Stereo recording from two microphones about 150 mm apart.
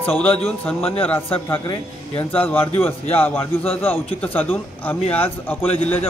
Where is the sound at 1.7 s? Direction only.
40° left (ahead or behind).